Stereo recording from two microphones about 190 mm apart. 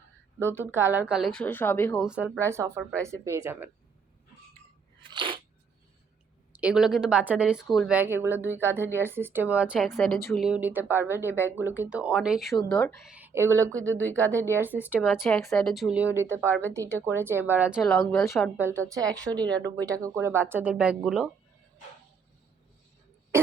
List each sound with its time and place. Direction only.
0.3 s speech: 15° right (ahead or behind); by 2.0 s 10° left (ahead or behind)
2.0 s a woman's voice: 5° right (ahead or behind)
5.0 s a sound: 25° right (ahead or behind)
6.6 s a woman's voice: 5° right (ahead or behind)
16.5 s speech: 10° left (ahead or behind)
16.7 s a woman's voice: 15° right (ahead or behind)
17.8 s speech: 5° left (ahead or behind)
18.5 s a woman's voice: 10° right (ahead or behind)
19.8 s a woman's voice: 15° right (ahead or behind)